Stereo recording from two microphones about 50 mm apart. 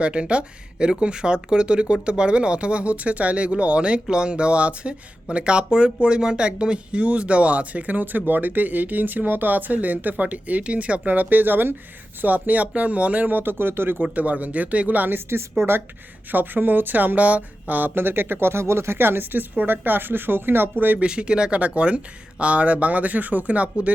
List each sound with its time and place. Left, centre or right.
0.0 s speech: right
14.0 s speech: right
15.4 s speech: right
16.3 s speech: right
21.0 s speech: right